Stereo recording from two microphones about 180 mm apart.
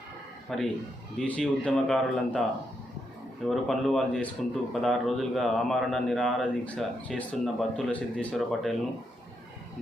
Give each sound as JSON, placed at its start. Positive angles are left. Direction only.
{"t": 0.5, "sound": "speech", "side_deg": 0}
{"t": 3.4, "sound": "speech", "side_deg": 0}